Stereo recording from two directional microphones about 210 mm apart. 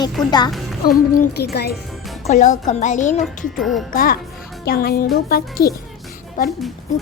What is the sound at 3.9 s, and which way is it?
Speech, 45° left (ahead or behind).